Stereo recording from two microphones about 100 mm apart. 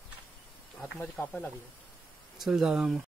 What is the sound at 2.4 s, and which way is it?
Speech, 5° right (ahead or behind).